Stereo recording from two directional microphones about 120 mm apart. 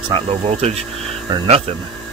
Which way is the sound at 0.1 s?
55° right (ahead or behind).